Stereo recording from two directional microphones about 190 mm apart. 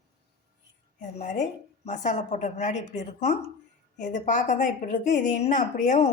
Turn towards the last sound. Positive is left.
turn(degrees=40)  # may be behind; listen again after turning